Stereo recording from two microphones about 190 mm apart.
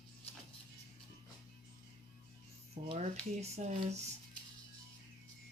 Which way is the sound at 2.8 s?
35° right (ahead or behind).